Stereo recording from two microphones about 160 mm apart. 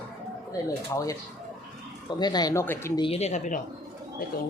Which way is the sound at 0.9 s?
20° left (ahead or behind).